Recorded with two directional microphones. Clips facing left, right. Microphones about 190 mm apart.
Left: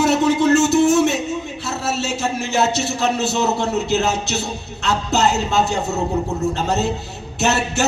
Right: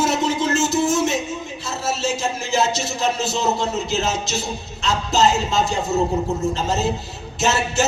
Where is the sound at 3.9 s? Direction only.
65° left (ahead or behind).